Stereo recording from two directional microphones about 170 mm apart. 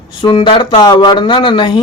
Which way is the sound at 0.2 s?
30° left (ahead or behind).